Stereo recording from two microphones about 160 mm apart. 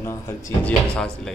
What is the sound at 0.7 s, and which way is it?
Speech, 5° left (ahead or behind).